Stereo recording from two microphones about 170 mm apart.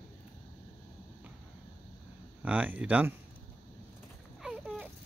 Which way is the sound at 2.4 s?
10° right (ahead or behind).